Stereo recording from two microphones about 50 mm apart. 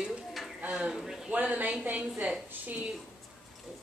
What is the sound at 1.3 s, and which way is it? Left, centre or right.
Speech, right.